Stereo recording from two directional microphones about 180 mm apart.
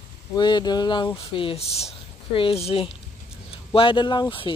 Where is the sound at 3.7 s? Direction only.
30° left (ahead or behind).